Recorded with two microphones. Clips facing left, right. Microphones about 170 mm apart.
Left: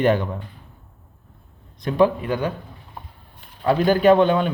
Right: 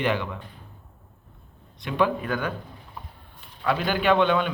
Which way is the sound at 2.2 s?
25° left (ahead or behind).